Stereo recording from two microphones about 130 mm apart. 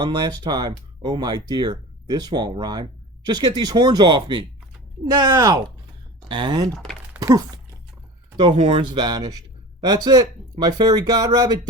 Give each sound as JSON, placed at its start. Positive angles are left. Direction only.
{"t": 0.0, "sound": "speech", "side_deg": -35}
{"t": 8.4, "sound": "speech", "side_deg": -40}
{"t": 11.3, "sound": "music", "side_deg": -30}